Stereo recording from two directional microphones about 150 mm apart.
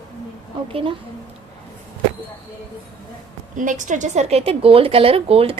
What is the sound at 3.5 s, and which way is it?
A woman's voice, 60° right (ahead or behind).